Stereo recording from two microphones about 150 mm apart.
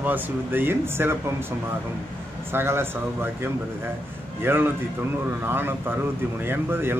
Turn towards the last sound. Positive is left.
turn(degrees=-15)  # may be behind; listen again after turning